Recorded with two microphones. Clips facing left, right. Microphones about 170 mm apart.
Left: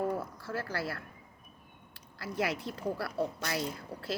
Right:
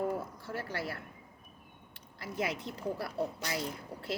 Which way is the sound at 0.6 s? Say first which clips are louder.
Left 1 dB; 15° right (ahead or behind).